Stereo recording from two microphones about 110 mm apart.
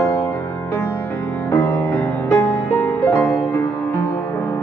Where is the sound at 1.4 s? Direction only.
20° left (ahead or behind).